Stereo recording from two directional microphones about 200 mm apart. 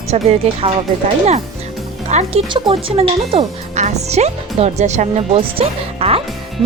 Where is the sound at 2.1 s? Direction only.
30° right (ahead or behind).